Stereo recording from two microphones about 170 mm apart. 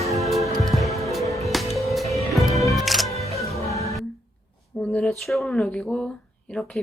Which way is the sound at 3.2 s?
40° left (ahead or behind).